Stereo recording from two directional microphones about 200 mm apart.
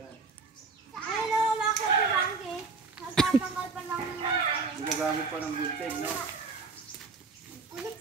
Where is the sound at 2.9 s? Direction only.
Centre (ahead or behind).